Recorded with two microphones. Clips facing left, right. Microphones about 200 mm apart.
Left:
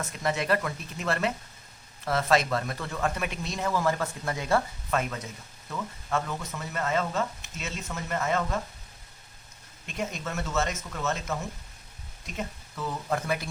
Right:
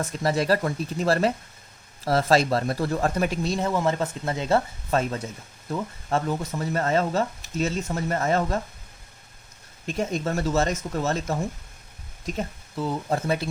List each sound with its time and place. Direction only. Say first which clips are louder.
0.0 s speech: right 5 dB; 35° right (ahead or behind)
9.8 s speech: right 7 dB; 35° right (ahead or behind)